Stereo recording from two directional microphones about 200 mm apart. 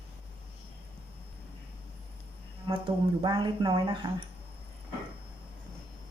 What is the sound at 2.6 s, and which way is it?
Speech, 25° right (ahead or behind).